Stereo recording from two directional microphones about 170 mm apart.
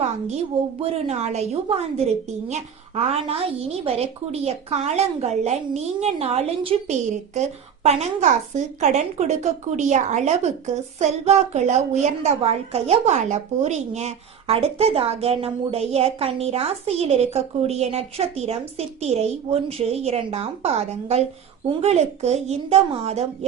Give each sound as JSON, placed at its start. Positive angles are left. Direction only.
{"t": 0.8, "sound": "a woman's voice", "side_deg": -35}